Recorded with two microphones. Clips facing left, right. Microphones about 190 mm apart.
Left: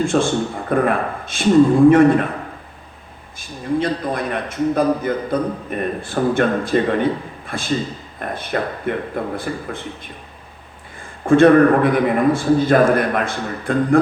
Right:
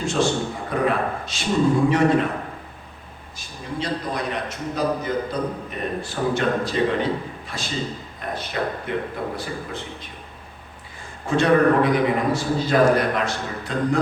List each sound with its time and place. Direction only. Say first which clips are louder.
0.0 s a man's voice: left 4 dB; 55° left (ahead or behind)
3.8 s a man's voice: left 4 dB; 55° left (ahead or behind)
11.3 s a man's voice: left 7 dB; 55° left (ahead or behind)